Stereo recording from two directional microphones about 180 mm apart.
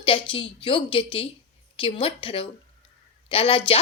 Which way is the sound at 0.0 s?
30° left (ahead or behind).